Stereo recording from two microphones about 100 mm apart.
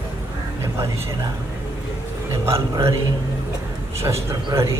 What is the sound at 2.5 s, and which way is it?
Speech, 30° right (ahead or behind).